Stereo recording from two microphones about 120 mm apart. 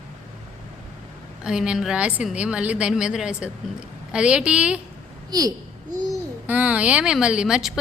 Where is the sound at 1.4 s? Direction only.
5° right (ahead or behind).